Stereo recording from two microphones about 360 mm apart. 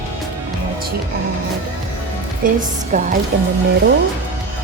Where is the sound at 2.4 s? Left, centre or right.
Right.